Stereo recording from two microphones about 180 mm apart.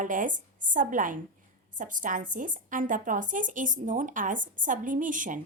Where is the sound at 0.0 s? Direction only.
45° right (ahead or behind).